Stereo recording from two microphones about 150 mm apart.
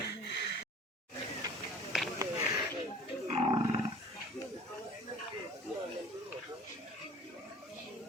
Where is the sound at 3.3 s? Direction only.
35° right (ahead or behind).